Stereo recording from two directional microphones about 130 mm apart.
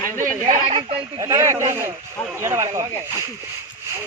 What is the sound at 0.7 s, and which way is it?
Speech, 50° right (ahead or behind).